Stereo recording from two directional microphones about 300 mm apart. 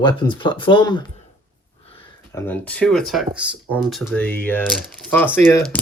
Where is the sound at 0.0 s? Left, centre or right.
Centre.